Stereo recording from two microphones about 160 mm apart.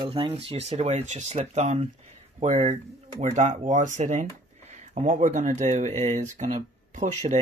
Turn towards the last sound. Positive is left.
turn(degrees=-50)  # may be behind; listen again after turning